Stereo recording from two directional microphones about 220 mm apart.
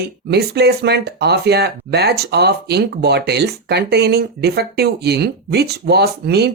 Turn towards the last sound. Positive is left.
turn(degrees=-45)  # may be behind; listen again after turning